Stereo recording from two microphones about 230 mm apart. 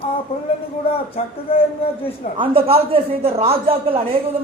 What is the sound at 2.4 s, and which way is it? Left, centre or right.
A woman's voice, right.